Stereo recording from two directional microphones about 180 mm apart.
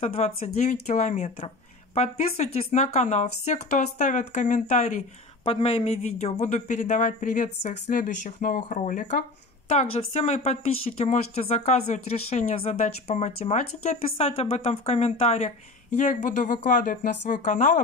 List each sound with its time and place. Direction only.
0.0 s speech: 35° left (ahead or behind)
5.4 s speech: 30° left (ahead or behind)